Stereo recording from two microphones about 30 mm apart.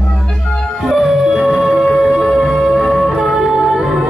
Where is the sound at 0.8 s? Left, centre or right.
Centre.